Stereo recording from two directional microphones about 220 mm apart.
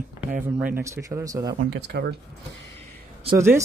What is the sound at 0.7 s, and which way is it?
Speech, 10° right (ahead or behind).